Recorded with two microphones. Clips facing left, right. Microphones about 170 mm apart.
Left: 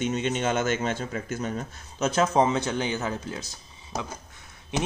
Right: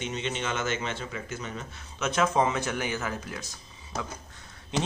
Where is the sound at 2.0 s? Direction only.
35° left (ahead or behind).